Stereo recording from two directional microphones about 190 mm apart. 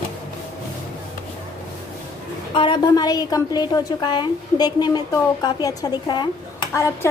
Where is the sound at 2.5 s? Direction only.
25° left (ahead or behind).